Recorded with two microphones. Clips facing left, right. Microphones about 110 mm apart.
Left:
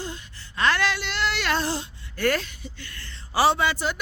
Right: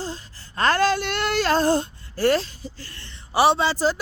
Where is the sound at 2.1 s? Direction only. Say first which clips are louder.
Right 4 dB; 30° right (ahead or behind).